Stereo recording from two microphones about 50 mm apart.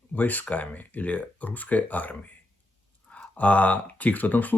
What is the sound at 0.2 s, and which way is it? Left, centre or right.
Speech, left.